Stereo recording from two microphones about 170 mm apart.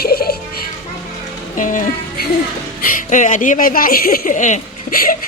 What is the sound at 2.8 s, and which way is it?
Speech, 50° left (ahead or behind).